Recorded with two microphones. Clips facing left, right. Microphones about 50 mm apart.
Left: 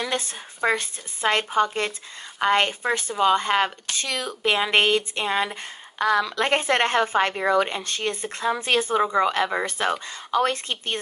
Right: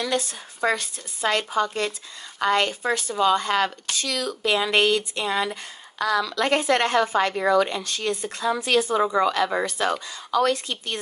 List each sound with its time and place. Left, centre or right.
0.0 s speech: left